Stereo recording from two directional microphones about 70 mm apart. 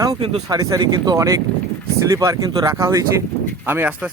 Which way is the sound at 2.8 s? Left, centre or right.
Right.